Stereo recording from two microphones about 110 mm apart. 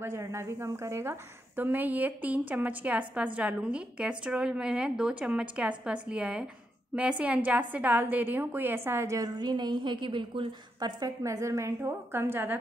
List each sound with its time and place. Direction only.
0.0 s a woman's voice: 25° right (ahead or behind)